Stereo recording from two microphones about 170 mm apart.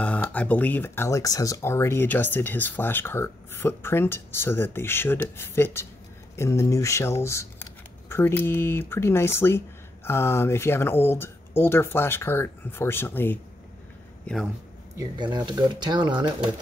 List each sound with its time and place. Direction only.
0.0 s speech: 10° left (ahead or behind)
14.2 s speech: centre (ahead or behind)
15.0 s speech: 25° right (ahead or behind)